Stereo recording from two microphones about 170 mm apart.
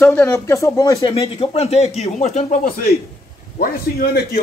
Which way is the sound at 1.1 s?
35° left (ahead or behind).